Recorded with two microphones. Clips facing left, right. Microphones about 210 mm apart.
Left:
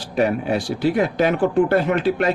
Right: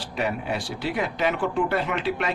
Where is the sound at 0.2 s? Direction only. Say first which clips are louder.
Left 8 dB; 40° left (ahead or behind).